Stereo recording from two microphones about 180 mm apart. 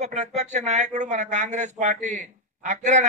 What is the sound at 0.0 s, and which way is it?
A man's voice, 40° right (ahead or behind).